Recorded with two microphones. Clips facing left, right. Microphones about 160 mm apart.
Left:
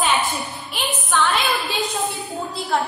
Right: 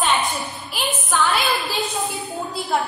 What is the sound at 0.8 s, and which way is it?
Speech, centre (ahead or behind).